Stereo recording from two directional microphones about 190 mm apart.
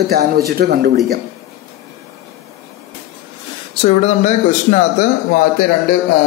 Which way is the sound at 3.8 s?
35° left (ahead or behind).